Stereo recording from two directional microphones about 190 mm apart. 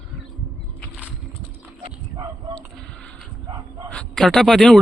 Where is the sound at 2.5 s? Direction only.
5° left (ahead or behind).